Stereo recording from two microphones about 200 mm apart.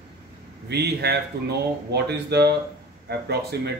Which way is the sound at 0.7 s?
55° right (ahead or behind).